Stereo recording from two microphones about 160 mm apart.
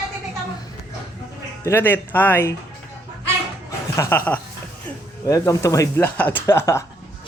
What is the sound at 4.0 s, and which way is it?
Speech, 15° left (ahead or behind).